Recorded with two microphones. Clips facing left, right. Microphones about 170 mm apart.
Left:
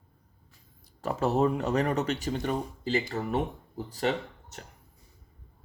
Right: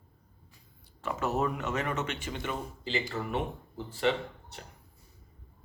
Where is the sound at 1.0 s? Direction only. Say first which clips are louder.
Left 5 dB; 30° left (ahead or behind).